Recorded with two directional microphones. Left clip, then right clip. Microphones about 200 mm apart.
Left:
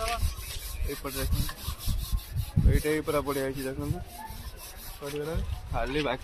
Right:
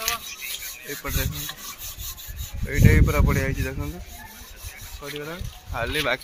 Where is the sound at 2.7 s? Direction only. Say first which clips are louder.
Right 5 dB; 20° right (ahead or behind).